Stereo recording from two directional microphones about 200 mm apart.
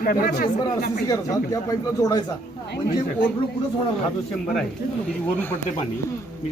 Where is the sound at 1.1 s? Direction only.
15° left (ahead or behind).